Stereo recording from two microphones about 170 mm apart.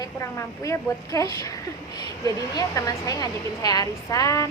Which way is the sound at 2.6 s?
20° left (ahead or behind).